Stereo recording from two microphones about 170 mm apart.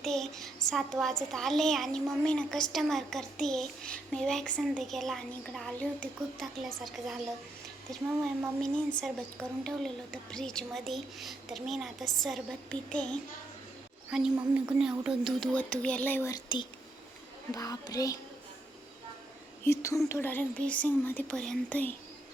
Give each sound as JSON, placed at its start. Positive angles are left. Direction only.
{"t": 0.0, "sound": "a child's voice", "side_deg": 0}
{"t": 8.6, "sound": "a child's voice", "side_deg": 5}
{"t": 17.5, "sound": "a child's voice", "side_deg": 20}
{"t": 19.6, "sound": "speech", "side_deg": 15}